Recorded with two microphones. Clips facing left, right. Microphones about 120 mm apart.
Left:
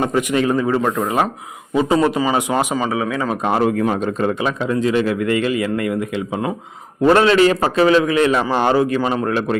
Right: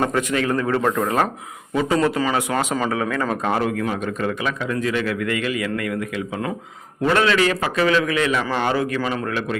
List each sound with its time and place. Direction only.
0.0 s a man's voice: 15° left (ahead or behind)
2.7 s a man's voice: 5° left (ahead or behind)
3.4 s a man's voice: 25° left (ahead or behind)
7.0 s a man's voice: 35° left (ahead or behind)
9.2 s a man's voice: 35° left (ahead or behind)